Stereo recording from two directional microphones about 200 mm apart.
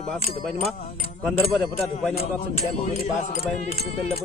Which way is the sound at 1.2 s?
Centre (ahead or behind).